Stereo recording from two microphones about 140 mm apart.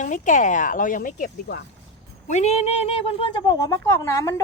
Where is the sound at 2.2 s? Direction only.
55° left (ahead or behind).